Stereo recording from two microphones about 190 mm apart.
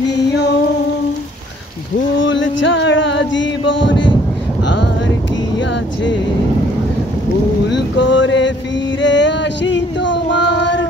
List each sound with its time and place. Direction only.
2.1 s music: 75° left (ahead or behind)
7.7 s music: 70° left (ahead or behind)
9.0 s female singing: 70° left (ahead or behind)